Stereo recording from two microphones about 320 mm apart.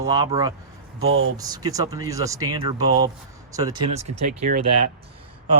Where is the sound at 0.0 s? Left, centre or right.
Centre.